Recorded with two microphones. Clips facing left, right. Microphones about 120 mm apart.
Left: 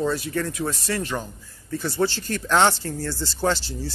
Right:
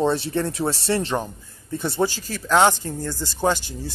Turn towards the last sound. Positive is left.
turn(degrees=-15)  # may be behind; listen again after turning